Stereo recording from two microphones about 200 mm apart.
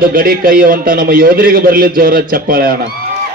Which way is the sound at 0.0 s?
45° right (ahead or behind).